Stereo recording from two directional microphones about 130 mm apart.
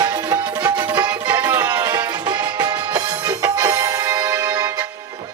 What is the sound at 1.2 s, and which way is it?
Music, 10° right (ahead or behind).